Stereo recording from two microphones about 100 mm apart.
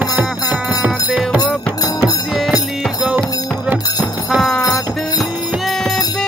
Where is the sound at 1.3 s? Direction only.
40° left (ahead or behind).